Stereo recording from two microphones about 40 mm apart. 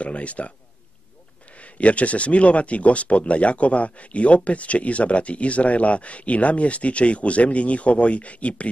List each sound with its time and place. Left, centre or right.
0.0 s speech: left
1.6 s speech: left